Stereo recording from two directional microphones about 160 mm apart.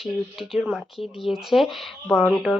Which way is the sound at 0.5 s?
Centre (ahead or behind).